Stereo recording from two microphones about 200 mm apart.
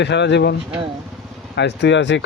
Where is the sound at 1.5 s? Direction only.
60° left (ahead or behind).